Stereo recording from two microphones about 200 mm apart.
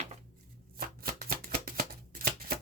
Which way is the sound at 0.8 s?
50° right (ahead or behind).